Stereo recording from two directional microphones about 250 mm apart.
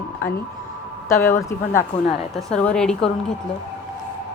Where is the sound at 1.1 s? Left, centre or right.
Centre.